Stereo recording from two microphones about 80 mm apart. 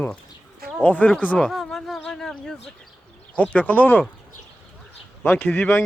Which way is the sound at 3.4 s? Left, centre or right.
Left.